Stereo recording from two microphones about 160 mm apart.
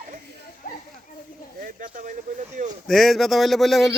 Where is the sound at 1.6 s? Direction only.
55° right (ahead or behind).